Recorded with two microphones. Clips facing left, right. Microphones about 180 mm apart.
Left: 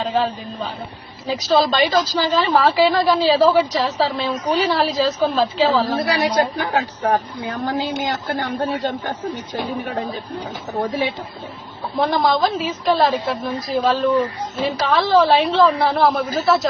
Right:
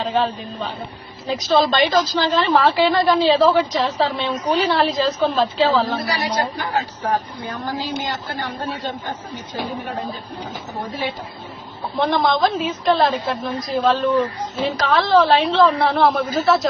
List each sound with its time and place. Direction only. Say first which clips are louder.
0.0 s a woman's voice: even; 5° left (ahead or behind)
6.1 s a man's voice: left 4 dB; 60° left (ahead or behind)
11.9 s a woman's voice: even; 5° left (ahead or behind)